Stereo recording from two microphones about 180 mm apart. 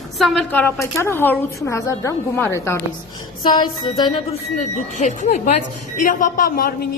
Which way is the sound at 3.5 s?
25° left (ahead or behind).